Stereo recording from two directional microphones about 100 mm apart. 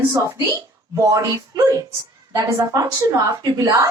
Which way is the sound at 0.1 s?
30° right (ahead or behind).